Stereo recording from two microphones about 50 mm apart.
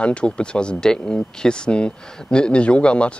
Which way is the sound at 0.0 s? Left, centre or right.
Left.